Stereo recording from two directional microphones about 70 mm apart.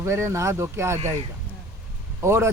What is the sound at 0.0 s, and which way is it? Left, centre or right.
Speech, right.